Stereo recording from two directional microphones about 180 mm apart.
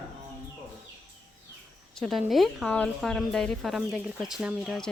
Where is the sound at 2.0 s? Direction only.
Centre (ahead or behind).